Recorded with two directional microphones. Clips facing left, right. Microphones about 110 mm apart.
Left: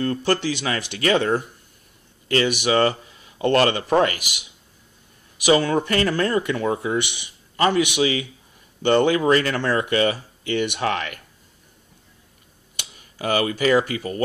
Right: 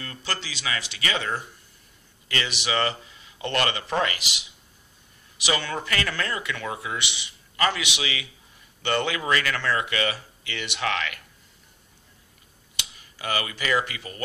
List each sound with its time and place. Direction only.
0.0 s speech: 50° left (ahead or behind)
5.5 s speech: 35° left (ahead or behind)
7.5 s a man's voice: 35° left (ahead or behind)
7.8 s speech: 45° left (ahead or behind)
13.2 s speech: 45° left (ahead or behind)